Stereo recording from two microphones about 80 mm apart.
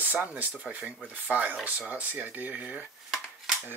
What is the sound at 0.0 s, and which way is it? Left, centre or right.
Speech, right.